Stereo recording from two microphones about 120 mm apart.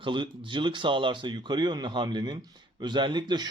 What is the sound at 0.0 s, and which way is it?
Speech, 40° right (ahead or behind).